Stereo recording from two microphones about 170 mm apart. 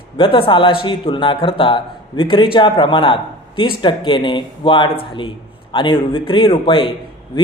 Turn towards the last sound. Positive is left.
turn(degrees=30)  # may be behind; listen again after turning